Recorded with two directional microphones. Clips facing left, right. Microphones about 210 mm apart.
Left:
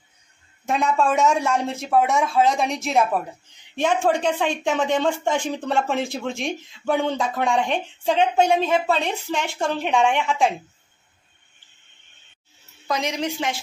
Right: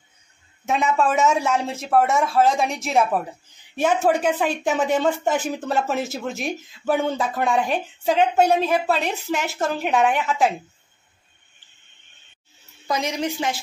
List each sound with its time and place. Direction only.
0.7 s speech: 5° right (ahead or behind)
12.8 s speech: 5° right (ahead or behind)